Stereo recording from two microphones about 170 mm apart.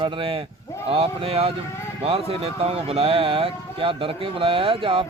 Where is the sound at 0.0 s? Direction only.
30° right (ahead or behind).